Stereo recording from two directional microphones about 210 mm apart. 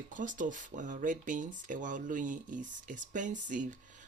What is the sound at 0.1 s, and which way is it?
Speech, 40° right (ahead or behind).